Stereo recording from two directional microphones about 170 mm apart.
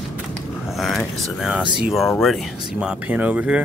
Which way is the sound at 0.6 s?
Centre (ahead or behind).